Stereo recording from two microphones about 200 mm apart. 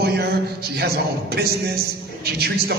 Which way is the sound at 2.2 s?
50° right (ahead or behind).